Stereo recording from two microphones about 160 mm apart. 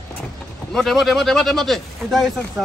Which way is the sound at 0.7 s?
Centre (ahead or behind).